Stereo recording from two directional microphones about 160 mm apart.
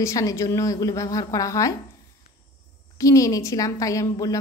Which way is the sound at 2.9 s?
20° left (ahead or behind).